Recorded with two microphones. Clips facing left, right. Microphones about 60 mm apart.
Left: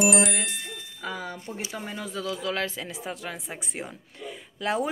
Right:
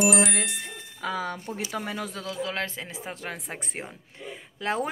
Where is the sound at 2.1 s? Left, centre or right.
Right.